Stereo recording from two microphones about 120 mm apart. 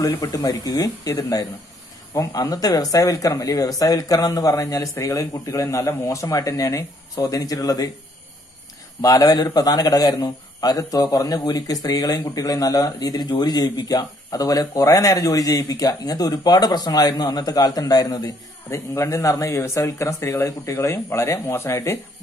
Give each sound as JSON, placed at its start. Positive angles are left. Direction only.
{"t": 0.0, "sound": "speech", "side_deg": 30}
{"t": 9.0, "sound": "a man's voice", "side_deg": 30}